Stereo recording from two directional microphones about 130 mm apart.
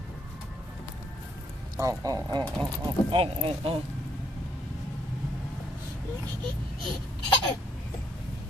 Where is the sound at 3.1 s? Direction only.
45° right (ahead or behind).